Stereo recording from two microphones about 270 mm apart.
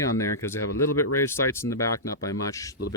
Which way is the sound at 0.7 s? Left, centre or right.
Left.